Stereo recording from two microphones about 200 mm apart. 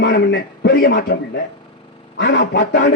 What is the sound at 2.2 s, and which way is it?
Speech, 60° left (ahead or behind).